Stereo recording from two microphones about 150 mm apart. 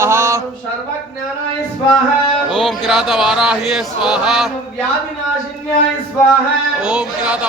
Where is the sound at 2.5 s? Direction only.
5° left (ahead or behind).